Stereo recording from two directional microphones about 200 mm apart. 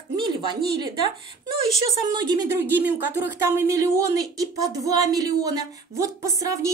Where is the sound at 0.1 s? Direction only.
25° right (ahead or behind).